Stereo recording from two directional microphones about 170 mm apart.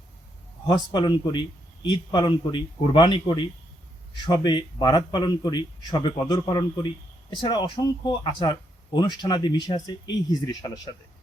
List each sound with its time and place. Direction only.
0.7 s speech: 25° left (ahead or behind)